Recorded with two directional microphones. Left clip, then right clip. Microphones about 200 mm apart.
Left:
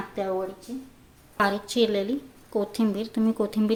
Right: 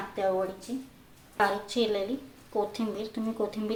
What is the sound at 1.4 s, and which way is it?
A woman's voice, 40° left (ahead or behind).